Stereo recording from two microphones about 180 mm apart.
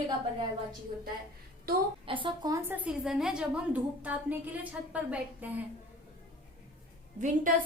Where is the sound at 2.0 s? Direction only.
30° right (ahead or behind).